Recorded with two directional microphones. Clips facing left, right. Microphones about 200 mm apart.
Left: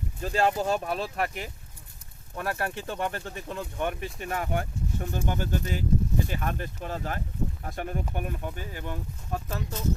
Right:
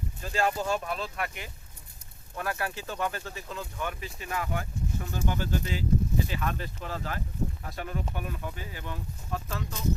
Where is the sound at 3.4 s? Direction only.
55° left (ahead or behind).